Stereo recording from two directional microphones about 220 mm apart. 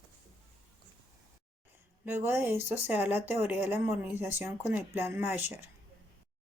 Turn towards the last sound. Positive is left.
turn(degrees=-10)  # may be behind; listen again after turning